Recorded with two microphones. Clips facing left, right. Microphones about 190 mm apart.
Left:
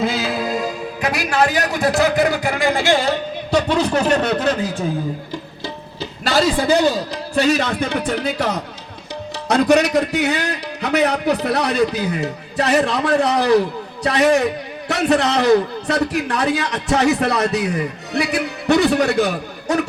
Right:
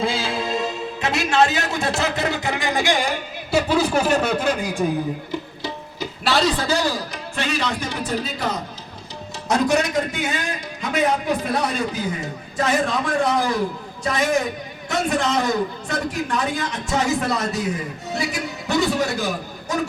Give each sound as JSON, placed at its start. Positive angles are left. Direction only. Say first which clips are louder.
{"t": 0.0, "sound": "music", "louder": "left 3 dB", "side_deg": -30}
{"t": 7.3, "sound": "a man's voice", "louder": "left 8 dB", "side_deg": 40}